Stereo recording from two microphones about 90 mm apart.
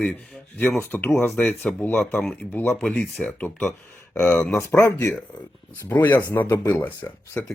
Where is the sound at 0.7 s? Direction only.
25° left (ahead or behind).